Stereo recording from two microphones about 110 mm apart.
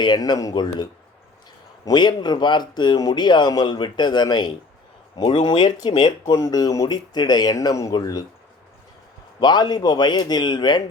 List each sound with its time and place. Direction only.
0.0 s speech: 40° left (ahead or behind)
5.1 s speech: 50° left (ahead or behind); by 8.2 s 35° left (ahead or behind)
9.4 s speech: 40° left (ahead or behind)